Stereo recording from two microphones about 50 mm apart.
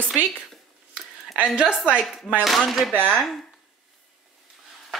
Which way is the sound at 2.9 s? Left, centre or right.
Left.